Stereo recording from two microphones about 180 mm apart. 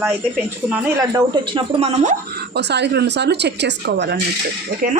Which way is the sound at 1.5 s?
35° right (ahead or behind).